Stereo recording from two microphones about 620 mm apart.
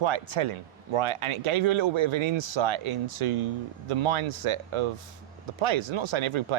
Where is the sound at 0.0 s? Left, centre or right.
Right.